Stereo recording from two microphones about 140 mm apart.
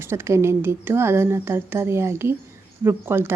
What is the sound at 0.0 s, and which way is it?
A woman's voice, 20° right (ahead or behind).